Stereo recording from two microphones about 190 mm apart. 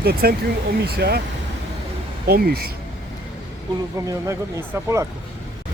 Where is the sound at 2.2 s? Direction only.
55° right (ahead or behind).